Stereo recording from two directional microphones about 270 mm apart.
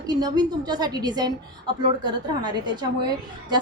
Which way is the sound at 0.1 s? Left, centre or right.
Centre.